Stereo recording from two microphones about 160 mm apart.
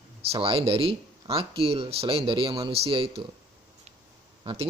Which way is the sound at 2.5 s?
20° right (ahead or behind).